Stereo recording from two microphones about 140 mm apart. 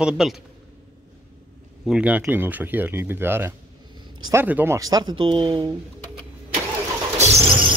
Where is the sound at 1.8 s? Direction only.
10° right (ahead or behind); by 5.7 s 35° right (ahead or behind).